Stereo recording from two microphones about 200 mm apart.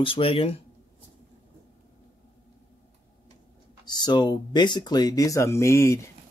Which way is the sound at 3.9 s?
20° left (ahead or behind).